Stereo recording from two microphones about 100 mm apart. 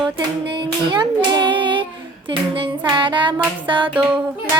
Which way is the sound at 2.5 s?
55° right (ahead or behind).